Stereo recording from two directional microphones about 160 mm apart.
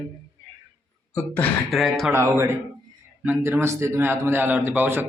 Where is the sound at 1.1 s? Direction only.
10° left (ahead or behind).